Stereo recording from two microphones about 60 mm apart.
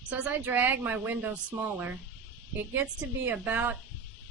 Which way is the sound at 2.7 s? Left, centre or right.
Right.